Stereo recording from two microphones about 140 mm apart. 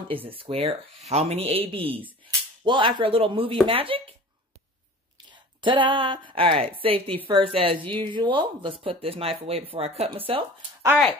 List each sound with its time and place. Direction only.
0.3 s speech: 40° right (ahead or behind)
5.1 s speech: 35° right (ahead or behind)